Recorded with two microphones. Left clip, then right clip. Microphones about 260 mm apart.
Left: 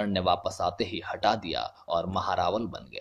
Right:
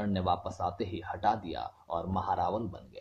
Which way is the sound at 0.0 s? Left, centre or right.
Left.